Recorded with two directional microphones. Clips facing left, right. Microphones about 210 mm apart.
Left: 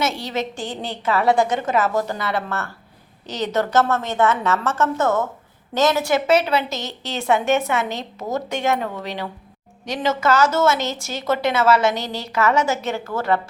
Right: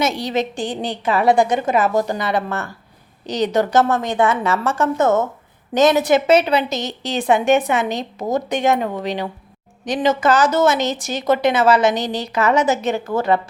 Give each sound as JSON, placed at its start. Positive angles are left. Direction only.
{"t": 0.0, "sound": "a woman's voice", "side_deg": -15}